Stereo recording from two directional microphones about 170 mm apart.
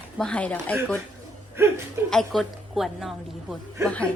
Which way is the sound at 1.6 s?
15° right (ahead or behind).